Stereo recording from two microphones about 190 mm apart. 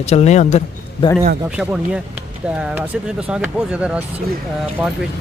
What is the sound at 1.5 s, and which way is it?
Speech, 5° right (ahead or behind).